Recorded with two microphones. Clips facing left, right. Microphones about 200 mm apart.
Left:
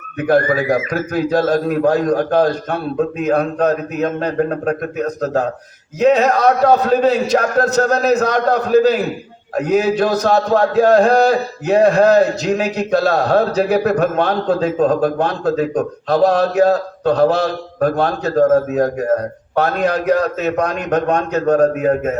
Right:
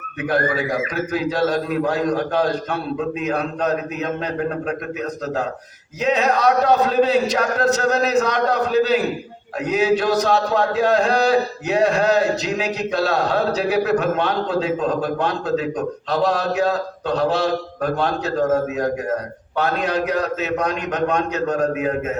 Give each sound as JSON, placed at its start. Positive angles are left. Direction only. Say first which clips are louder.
{"t": 0.2, "sound": "a man's voice", "louder": "left 6 dB", "side_deg": 45}